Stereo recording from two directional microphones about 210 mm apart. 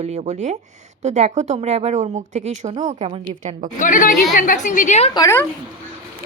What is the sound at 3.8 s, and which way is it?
A woman's voice, 40° left (ahead or behind).